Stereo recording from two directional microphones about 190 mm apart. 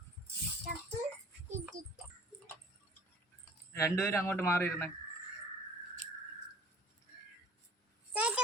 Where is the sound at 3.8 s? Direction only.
15° left (ahead or behind).